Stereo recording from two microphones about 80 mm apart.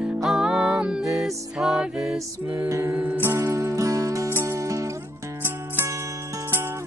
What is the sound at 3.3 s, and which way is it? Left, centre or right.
Music, right.